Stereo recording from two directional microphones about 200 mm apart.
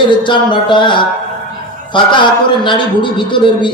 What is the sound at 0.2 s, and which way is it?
Speech, 25° left (ahead or behind).